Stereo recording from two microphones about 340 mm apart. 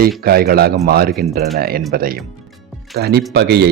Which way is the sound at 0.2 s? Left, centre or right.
Right.